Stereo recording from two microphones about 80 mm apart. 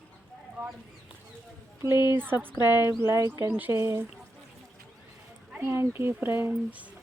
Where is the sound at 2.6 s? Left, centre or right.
Left.